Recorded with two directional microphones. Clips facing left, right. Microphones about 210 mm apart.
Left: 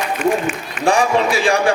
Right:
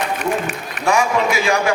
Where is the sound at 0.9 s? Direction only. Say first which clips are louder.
Left 2 dB; 30° left (ahead or behind).